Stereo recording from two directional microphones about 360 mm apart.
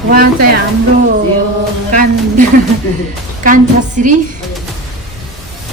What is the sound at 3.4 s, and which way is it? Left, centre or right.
Speech, right.